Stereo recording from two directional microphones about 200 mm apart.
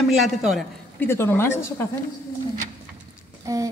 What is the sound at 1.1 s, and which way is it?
Speech, 10° left (ahead or behind).